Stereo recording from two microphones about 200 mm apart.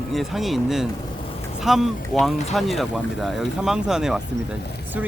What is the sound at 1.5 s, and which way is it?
Speech, centre (ahead or behind).